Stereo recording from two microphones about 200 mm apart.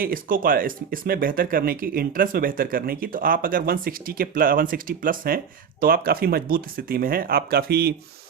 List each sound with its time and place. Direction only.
0.0 s speech: 45° right (ahead or behind)